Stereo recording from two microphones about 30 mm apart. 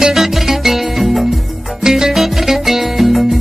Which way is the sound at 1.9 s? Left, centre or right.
Centre.